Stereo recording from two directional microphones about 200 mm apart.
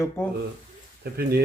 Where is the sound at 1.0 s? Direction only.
50° right (ahead or behind).